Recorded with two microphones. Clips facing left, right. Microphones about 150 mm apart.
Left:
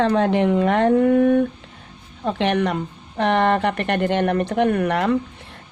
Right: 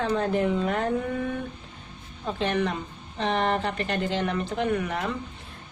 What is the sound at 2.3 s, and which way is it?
Speech, 70° left (ahead or behind).